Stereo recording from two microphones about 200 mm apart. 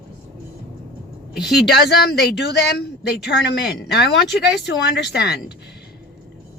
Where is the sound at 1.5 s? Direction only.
55° left (ahead or behind).